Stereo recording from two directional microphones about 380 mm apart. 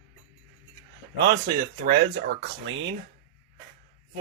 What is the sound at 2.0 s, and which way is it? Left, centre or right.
Speech, right.